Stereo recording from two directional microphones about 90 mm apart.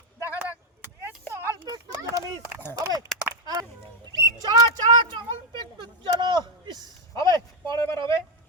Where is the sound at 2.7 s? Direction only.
45° right (ahead or behind).